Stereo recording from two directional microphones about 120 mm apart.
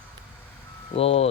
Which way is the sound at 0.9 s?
55° left (ahead or behind).